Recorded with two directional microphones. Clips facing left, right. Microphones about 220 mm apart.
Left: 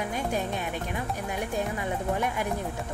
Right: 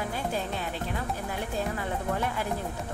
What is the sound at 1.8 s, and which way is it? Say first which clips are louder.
Speech: left 2 dB; 15° left (ahead or behind).